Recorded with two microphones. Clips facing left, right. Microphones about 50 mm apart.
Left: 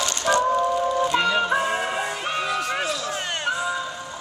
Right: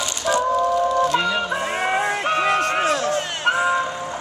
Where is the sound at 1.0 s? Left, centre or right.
Centre.